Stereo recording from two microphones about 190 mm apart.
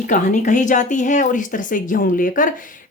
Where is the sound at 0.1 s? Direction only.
40° left (ahead or behind).